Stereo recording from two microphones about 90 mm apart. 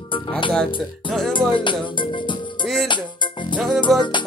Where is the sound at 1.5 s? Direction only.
65° left (ahead or behind).